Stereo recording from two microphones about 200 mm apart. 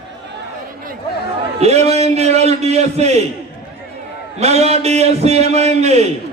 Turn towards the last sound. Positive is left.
turn(degrees=-30)  # may be behind; listen again after turning